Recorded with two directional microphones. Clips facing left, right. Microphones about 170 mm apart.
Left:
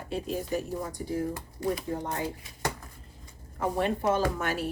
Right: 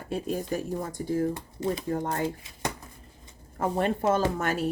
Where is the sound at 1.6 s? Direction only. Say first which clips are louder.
Right 1 dB; 20° right (ahead or behind).